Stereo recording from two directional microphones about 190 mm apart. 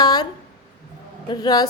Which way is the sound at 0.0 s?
20° left (ahead or behind).